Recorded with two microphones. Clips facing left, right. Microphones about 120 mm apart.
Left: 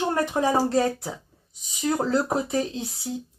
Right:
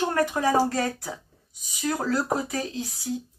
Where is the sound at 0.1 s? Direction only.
25° left (ahead or behind).